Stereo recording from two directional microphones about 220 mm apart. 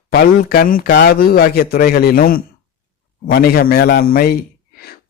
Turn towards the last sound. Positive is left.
turn(degrees=45)  # may be behind; listen again after turning